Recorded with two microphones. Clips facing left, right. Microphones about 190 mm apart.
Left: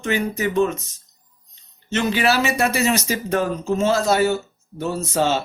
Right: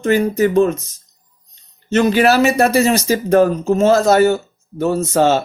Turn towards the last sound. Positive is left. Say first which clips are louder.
# right 6 dB
turn(degrees=-45)  # may be behind; listen again after turning